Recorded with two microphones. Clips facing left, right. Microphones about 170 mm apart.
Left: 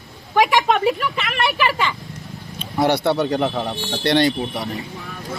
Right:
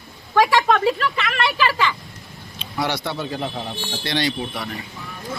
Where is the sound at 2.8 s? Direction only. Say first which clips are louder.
Left 8 dB; 60° left (ahead or behind).